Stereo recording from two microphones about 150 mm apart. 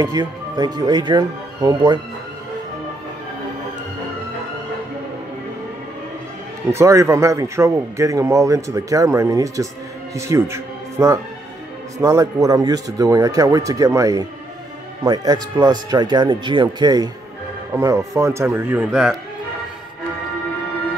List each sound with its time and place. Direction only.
0.0 s a man's voice: 25° right (ahead or behind)
6.7 s a man's voice: 20° right (ahead or behind)
18.9 s speech: 5° right (ahead or behind)